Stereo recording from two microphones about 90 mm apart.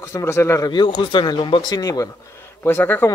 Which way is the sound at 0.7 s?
60° left (ahead or behind).